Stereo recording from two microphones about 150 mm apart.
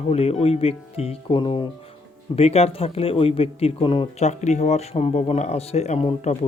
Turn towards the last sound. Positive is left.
turn(degrees=40)  # may be behind; listen again after turning